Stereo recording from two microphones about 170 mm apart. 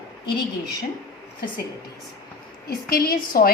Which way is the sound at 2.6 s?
60° left (ahead or behind).